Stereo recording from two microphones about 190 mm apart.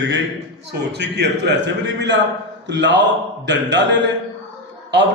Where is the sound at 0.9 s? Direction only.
60° right (ahead or behind).